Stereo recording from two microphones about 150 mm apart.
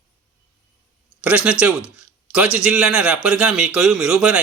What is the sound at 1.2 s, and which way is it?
Speech, 10° right (ahead or behind).